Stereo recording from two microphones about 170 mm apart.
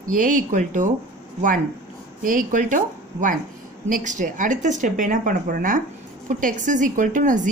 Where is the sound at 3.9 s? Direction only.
50° right (ahead or behind).